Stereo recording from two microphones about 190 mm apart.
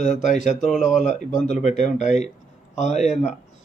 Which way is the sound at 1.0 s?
40° left (ahead or behind).